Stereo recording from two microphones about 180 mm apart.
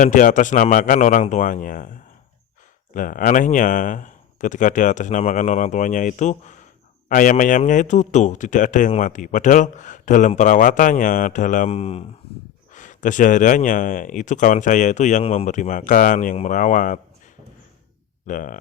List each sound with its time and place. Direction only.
0.0 s a man's voice: 45° left (ahead or behind)
2.9 s a man's voice: 50° left (ahead or behind)
12.7 s a man's voice: 45° left (ahead or behind)
18.3 s a man's voice: 45° left (ahead or behind)